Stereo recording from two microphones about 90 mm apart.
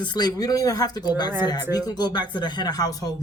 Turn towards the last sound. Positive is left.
turn(degrees=45)  # may be behind; listen again after turning